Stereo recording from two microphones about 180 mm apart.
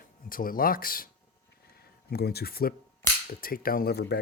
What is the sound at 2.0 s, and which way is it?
Speech, 60° left (ahead or behind).